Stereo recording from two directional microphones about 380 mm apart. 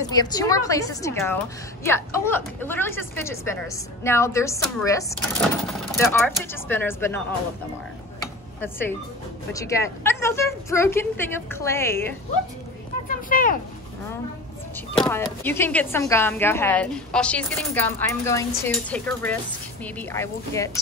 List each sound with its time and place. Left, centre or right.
0.1 s a woman's voice: centre
8.5 s a woman's voice: centre
13.1 s speech: left
15.0 s a woman's voice: centre